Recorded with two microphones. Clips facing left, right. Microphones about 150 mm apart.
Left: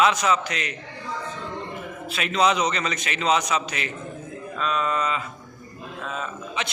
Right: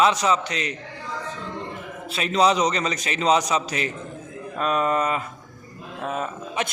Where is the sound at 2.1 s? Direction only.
35° right (ahead or behind).